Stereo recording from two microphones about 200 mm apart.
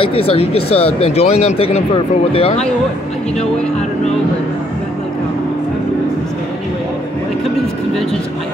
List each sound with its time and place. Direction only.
0.0 s speech: 30° left (ahead or behind)